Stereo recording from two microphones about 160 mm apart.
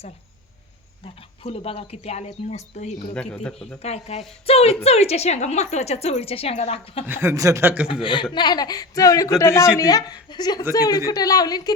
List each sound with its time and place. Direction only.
1.0 s a woman's voice: 40° left (ahead or behind)
3.2 s speech: 5° left (ahead or behind)
3.8 s a woman's voice: 40° left (ahead or behind)
7.1 s speech: 15° right (ahead or behind)
8.0 s a man's voice: 30° left (ahead or behind)